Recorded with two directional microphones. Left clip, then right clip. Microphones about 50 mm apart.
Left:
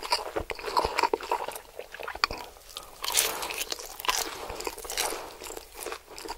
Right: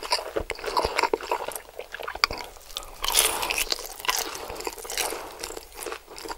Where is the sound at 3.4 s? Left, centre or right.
Right.